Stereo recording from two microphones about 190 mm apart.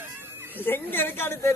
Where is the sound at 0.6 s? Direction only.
10° left (ahead or behind).